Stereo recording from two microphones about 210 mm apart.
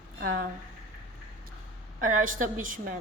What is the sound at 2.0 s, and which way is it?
Speech, 40° right (ahead or behind).